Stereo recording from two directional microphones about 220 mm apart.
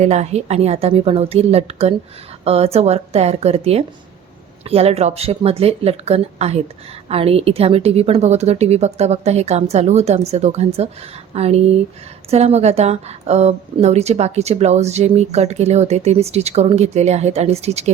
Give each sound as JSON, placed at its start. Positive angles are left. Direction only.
{"t": 0.0, "sound": "a woman's voice", "side_deg": -30}